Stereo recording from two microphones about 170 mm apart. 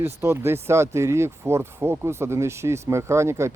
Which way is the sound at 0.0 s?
15° right (ahead or behind).